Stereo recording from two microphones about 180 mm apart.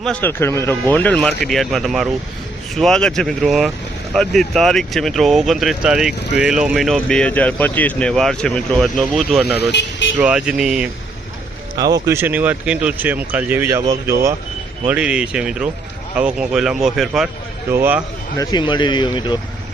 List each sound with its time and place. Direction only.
0.0 s speech: 10° left (ahead or behind)
9.6 s speech: 85° left
10.2 s speech: 5° right (ahead or behind)
11.8 s speech: 20° right (ahead or behind)
14.8 s speech: 5° right (ahead or behind)
17.7 s speech: 10° right (ahead or behind)
18.3 s speech: 25° left (ahead or behind)